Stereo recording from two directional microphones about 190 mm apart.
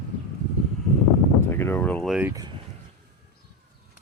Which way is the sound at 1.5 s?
10° left (ahead or behind).